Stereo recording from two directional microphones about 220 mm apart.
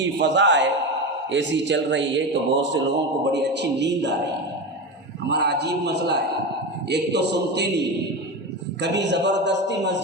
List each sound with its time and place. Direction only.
0.0 s a man's voice: 55° right (ahead or behind)
5.3 s a man's voice: 50° right (ahead or behind)